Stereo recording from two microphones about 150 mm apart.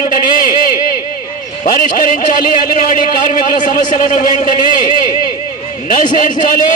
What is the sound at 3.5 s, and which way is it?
Speech, 60° left (ahead or behind).